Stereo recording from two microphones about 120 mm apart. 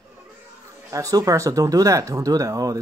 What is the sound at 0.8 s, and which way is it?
Speech, 30° right (ahead or behind).